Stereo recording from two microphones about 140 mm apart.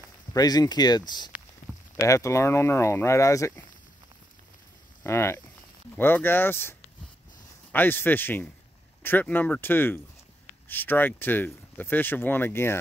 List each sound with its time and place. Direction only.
0.3 s speech: 25° left (ahead or behind)
5.0 s speech: 20° left (ahead or behind)